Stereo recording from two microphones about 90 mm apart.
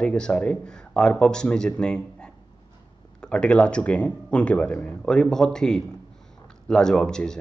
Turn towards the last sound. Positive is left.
turn(degrees=10)  # may be behind; listen again after turning